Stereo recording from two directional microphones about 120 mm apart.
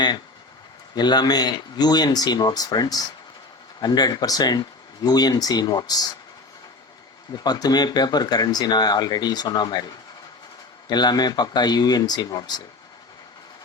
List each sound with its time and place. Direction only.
0.9 s speech: 35° left (ahead or behind)
7.3 s speech: 35° left (ahead or behind)